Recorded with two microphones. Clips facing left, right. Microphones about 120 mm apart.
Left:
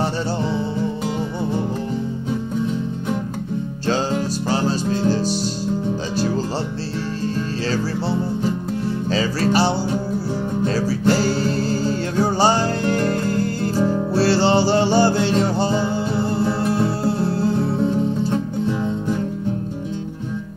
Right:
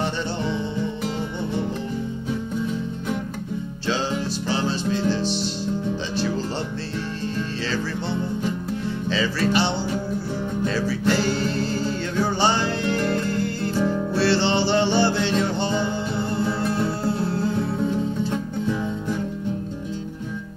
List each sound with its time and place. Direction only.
0.0 s music: 35° left (ahead or behind)
3.8 s music: 45° left (ahead or behind); by 19.1 s 25° left (ahead or behind)